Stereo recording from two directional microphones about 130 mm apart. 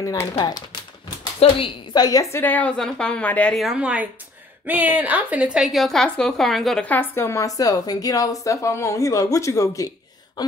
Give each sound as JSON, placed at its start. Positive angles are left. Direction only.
{"t": 0.0, "sound": "speech", "side_deg": 25}
{"t": 1.4, "sound": "speech", "side_deg": 50}
{"t": 2.0, "sound": "a woman's voice", "side_deg": 30}
{"t": 2.3, "sound": "a woman's voice", "side_deg": 15}
{"t": 3.5, "sound": "a woman's voice", "side_deg": -5}
{"t": 6.9, "sound": "a woman's voice", "side_deg": 15}